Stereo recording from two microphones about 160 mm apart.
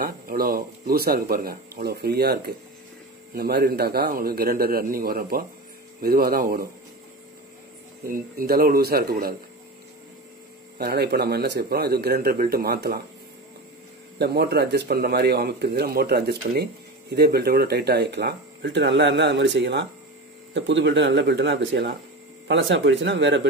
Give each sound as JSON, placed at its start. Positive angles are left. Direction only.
{"t": 0.0, "sound": "speech", "side_deg": -65}
{"t": 8.1, "sound": "speech", "side_deg": -65}
{"t": 10.8, "sound": "speech", "side_deg": -85}
{"t": 14.1, "sound": "speech", "side_deg": -90}
{"t": 23.0, "sound": "speech", "side_deg": -90}